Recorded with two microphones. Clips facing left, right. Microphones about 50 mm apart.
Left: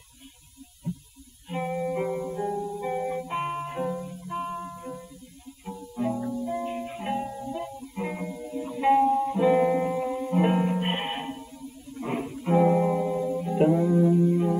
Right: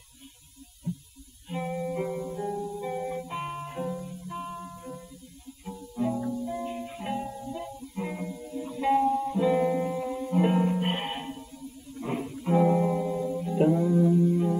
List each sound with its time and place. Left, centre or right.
1.5 s music: centre